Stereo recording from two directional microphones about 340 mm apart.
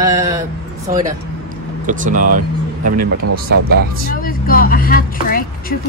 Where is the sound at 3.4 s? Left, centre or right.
Right.